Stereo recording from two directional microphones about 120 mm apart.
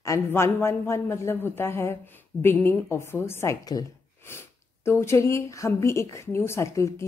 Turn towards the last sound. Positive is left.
turn(degrees=25)  # may be behind; listen again after turning